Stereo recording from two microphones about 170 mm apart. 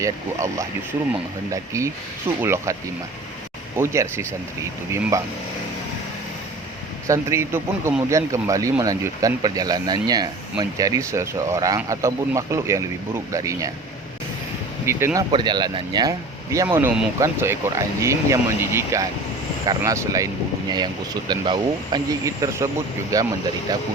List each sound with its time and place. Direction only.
0.0 s speech: 20° right (ahead or behind)
3.8 s speech: 15° right (ahead or behind)
7.1 s speech: 15° right (ahead or behind)
14.8 s speech: 15° right (ahead or behind)
15.3 s speech: 25° right (ahead or behind)